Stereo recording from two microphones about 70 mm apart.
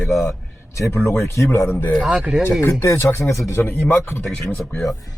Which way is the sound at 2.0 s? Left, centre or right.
Centre.